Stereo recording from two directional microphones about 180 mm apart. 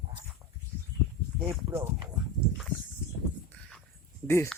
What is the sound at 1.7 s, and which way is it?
Speech, 15° right (ahead or behind).